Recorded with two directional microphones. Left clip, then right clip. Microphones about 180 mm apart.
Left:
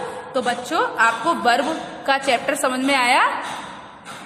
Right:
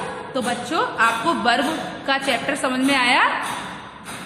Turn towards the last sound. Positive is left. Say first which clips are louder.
# even
turn(degrees=30)  # may be behind; listen again after turning